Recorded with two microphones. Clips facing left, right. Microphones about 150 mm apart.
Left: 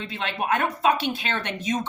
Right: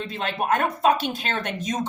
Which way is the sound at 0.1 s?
45° right (ahead or behind).